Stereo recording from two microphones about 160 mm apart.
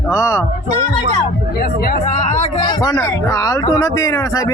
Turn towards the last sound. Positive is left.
turn(degrees=20)  # may be behind; listen again after turning